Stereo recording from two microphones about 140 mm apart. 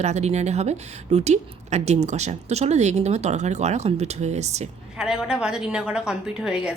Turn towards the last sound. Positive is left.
turn(degrees=-5)  # may be behind; listen again after turning